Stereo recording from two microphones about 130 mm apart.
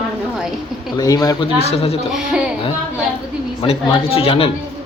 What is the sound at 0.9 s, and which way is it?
Speech, 30° left (ahead or behind).